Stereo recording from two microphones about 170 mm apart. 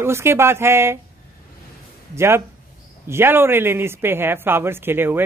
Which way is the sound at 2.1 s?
15° right (ahead or behind).